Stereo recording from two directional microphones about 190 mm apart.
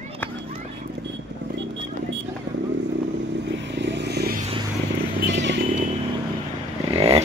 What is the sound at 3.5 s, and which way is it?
Vehicle, 65° right (ahead or behind).